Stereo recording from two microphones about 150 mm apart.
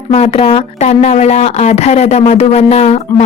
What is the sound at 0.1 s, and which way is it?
A woman's voice, 40° left (ahead or behind).